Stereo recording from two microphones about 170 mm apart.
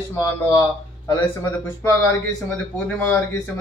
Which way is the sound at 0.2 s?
15° left (ahead or behind).